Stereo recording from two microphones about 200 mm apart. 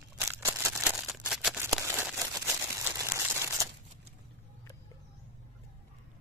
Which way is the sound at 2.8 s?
10° right (ahead or behind).